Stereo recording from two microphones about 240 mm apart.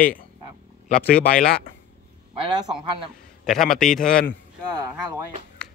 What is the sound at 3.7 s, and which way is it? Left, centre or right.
Speech, centre.